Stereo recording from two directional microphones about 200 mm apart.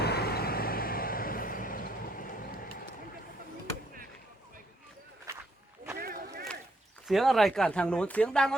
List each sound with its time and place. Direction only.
0.0 s vehicle: 55° left (ahead or behind)
5.3 s walk: 15° right (ahead or behind)
6.0 s a sound: 45° right (ahead or behind)
7.1 s speech: centre (ahead or behind)